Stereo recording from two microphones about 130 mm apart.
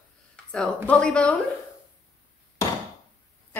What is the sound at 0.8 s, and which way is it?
Speech, 5° left (ahead or behind).